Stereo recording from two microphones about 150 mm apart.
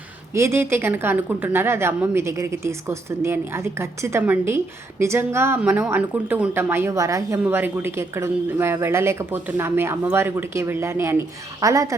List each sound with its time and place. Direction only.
0.3 s a woman's voice: 15° right (ahead or behind)